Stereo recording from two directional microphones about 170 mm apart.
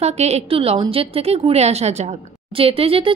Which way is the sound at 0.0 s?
40° right (ahead or behind).